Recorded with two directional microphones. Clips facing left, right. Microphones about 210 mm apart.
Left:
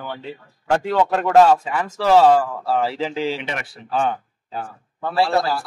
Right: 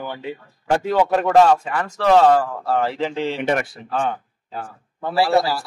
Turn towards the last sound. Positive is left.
turn(degrees=-10)  # may be behind; listen again after turning